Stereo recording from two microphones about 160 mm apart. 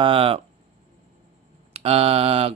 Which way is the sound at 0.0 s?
35° right (ahead or behind).